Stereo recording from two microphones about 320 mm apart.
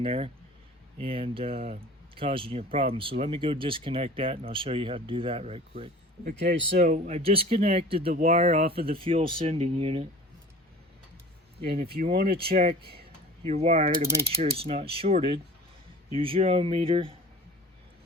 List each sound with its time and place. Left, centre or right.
0.0 s speech: centre
11.6 s speech: right